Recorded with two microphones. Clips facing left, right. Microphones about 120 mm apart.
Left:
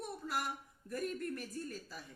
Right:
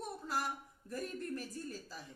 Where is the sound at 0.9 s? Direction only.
30° right (ahead or behind).